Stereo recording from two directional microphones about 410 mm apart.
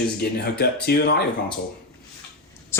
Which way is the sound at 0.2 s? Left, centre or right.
Left.